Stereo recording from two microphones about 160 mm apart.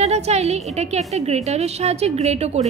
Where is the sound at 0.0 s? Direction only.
40° right (ahead or behind).